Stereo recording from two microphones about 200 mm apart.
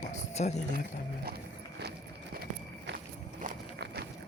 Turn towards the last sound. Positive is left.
turn(degrees=-55)  # may be behind; listen again after turning